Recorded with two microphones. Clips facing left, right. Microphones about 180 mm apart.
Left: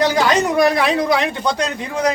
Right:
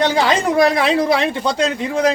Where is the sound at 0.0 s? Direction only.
25° right (ahead or behind).